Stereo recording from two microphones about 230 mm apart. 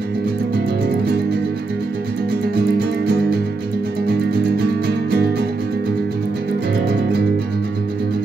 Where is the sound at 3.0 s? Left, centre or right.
Right.